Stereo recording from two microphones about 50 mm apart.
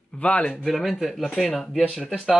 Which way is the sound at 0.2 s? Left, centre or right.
Left.